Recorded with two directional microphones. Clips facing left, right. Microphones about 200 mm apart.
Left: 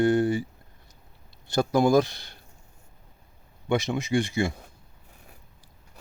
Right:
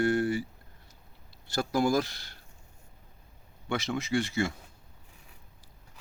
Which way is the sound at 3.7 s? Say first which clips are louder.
Left 5 dB; 15° left (ahead or behind).